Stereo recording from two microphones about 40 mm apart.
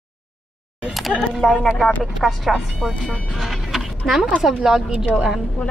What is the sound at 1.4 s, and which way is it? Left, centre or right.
Speech, centre.